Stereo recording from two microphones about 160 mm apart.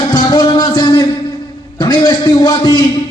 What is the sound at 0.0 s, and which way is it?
Music, 25° left (ahead or behind).